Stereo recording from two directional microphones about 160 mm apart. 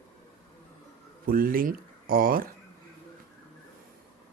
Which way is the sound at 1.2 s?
65° right (ahead or behind).